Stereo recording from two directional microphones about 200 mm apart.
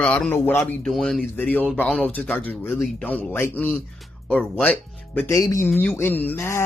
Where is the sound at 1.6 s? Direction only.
5° left (ahead or behind).